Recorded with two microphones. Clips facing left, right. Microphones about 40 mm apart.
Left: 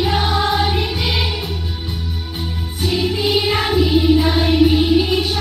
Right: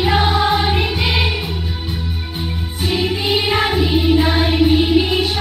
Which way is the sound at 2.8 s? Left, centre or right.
Centre.